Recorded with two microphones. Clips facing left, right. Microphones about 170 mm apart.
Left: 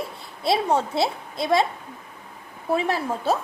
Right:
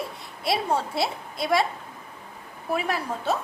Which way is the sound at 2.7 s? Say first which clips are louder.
Left 4 dB; 30° left (ahead or behind).